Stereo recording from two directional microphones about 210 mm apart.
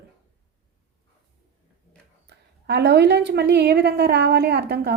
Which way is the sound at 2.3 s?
55° right (ahead or behind).